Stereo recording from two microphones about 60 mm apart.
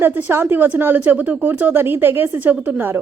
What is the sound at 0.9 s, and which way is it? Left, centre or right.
A woman's voice, right.